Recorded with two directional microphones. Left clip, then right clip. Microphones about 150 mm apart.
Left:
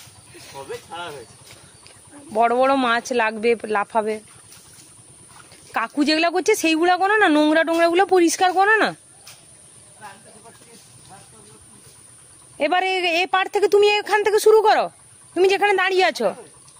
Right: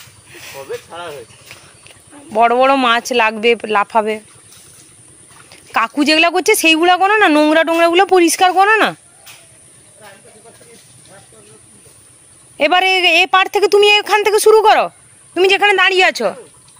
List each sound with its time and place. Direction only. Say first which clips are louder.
0.3 s a sound: right 6 dB; 5° right (ahead or behind)
0.7 s speech: right 5 dB; 25° left (ahead or behind)
2.3 s a woman's voice: right 6 dB; 5° right (ahead or behind)
5.7 s a woman's voice: right 7 dB; 10° right (ahead or behind)
12.5 s a woman's voice: right 8 dB; 10° right (ahead or behind)